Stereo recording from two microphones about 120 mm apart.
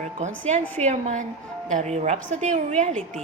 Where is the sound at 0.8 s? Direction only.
80° right.